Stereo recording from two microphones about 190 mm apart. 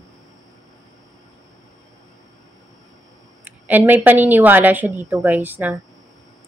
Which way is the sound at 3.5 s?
10° right (ahead or behind).